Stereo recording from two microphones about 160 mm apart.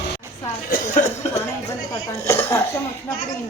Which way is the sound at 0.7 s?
45° left (ahead or behind).